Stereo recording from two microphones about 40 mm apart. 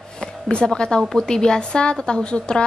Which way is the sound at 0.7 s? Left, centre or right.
Left.